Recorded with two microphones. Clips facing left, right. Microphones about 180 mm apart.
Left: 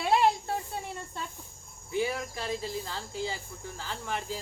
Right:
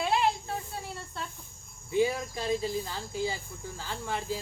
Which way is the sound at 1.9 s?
20° right (ahead or behind).